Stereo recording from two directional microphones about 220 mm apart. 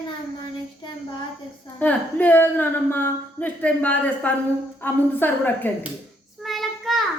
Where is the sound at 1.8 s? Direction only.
10° left (ahead or behind).